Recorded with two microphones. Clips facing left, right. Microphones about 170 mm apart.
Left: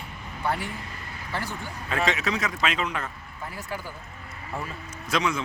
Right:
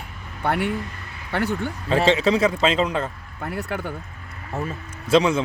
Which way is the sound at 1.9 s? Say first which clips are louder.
Right 8 dB; 30° right (ahead or behind).